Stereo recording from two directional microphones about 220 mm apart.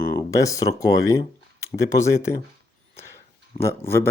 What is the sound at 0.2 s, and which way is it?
Speech, 15° left (ahead or behind).